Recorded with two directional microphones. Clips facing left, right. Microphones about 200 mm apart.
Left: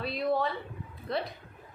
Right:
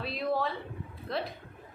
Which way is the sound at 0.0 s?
Centre (ahead or behind).